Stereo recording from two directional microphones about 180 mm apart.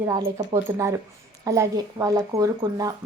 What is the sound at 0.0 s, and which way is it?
Speech, 20° right (ahead or behind).